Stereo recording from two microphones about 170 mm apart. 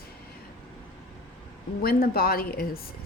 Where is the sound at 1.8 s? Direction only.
60° left (ahead or behind).